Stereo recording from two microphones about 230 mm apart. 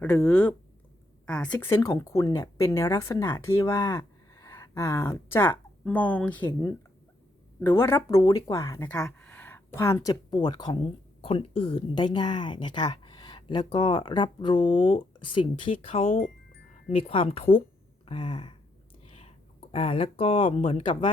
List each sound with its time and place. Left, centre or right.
0.0 s speech: centre
7.6 s speech: centre
16.0 s speech: left
16.9 s speech: left
18.0 s a sound: left
19.0 s speech: left